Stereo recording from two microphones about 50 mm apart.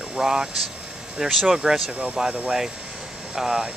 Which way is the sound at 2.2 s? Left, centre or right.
Centre.